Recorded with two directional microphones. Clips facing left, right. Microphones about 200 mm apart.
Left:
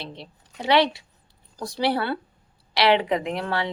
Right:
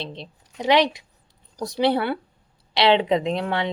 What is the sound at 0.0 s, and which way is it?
A woman's voice, 20° right (ahead or behind).